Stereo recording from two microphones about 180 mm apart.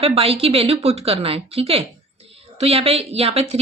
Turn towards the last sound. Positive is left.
turn(degrees=-35)  # may be behind; listen again after turning